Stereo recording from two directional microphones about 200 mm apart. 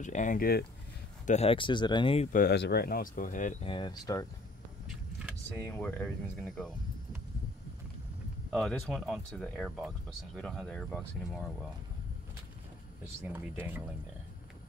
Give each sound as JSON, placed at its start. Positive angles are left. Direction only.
{"t": 0.0, "sound": "speech", "side_deg": 40}
{"t": 1.2, "sound": "speech", "side_deg": 35}
{"t": 2.3, "sound": "speech", "side_deg": 50}
{"t": 3.6, "sound": "speech", "side_deg": 25}
{"t": 5.7, "sound": "speech", "side_deg": 10}
{"t": 8.5, "sound": "speech", "side_deg": 5}
{"t": 13.2, "sound": "speech", "side_deg": -10}